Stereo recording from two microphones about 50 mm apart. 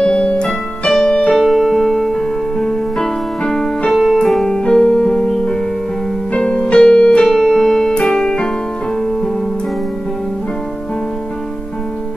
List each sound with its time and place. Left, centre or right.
0.0 s music: left
0.5 s music: centre
1.0 s keyboard: centre
1.3 s piano: centre
3.9 s music: centre
7.0 s piano: left
7.2 s keyboard: centre